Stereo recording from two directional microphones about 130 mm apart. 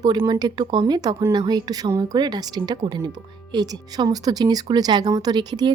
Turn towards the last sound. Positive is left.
turn(degrees=-30)  # may be behind; listen again after turning